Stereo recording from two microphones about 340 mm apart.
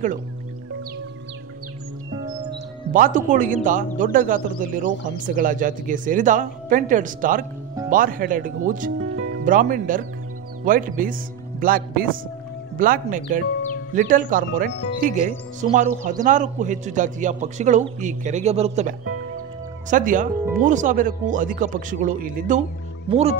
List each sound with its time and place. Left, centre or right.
2.9 s speech: right
9.0 s music: right
9.4 s speech: right